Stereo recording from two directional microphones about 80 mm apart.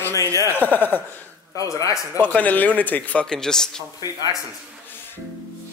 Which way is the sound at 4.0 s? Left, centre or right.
Left.